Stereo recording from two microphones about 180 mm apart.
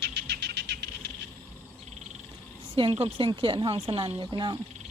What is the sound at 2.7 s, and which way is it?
Speech, 30° right (ahead or behind).